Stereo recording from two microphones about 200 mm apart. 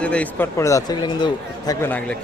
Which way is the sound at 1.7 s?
10° left (ahead or behind).